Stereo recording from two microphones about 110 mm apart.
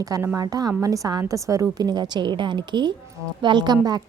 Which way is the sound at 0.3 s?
35° right (ahead or behind).